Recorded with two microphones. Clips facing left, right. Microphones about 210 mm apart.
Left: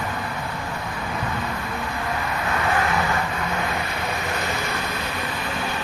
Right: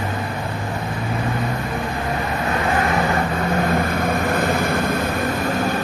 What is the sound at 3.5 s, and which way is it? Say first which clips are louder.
Vehicle: right 7 dB; 50° right (ahead or behind).